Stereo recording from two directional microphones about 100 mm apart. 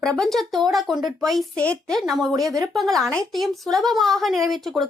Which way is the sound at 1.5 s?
10° left (ahead or behind).